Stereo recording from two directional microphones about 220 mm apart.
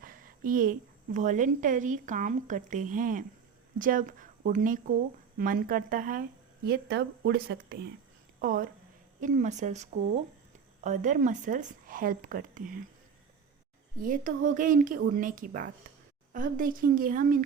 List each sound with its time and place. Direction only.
0.0 s a woman's voice: 40° right (ahead or behind)
14.0 s a woman's voice: 35° right (ahead or behind)